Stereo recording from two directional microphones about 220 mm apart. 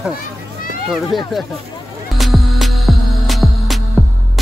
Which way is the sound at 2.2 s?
Centre (ahead or behind).